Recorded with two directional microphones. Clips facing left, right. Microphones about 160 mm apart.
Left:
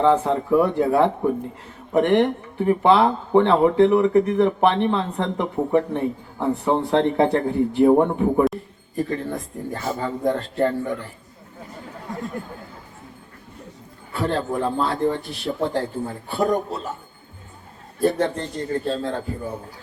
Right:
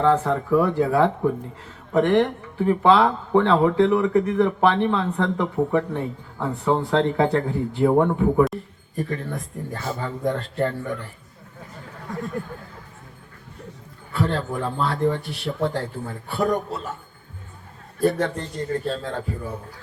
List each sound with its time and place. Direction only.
0.0 s speech: 20° left (ahead or behind)
9.0 s speech: 30° left (ahead or behind)
12.0 s a sound: 25° left (ahead or behind)
14.3 s speech: 25° left (ahead or behind)
18.0 s speech: 25° left (ahead or behind)